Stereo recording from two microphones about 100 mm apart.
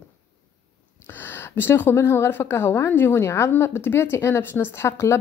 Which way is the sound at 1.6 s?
20° left (ahead or behind).